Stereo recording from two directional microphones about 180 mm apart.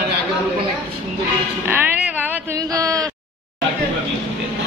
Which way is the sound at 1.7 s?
10° right (ahead or behind).